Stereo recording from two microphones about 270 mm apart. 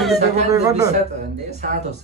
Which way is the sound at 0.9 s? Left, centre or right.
Right.